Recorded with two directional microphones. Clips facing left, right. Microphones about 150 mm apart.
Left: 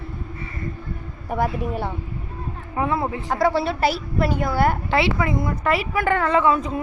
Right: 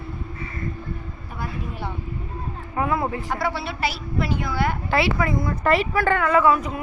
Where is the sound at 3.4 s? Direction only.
45° left (ahead or behind).